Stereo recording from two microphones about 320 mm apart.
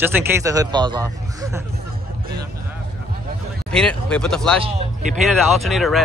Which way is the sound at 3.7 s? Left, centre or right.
Centre.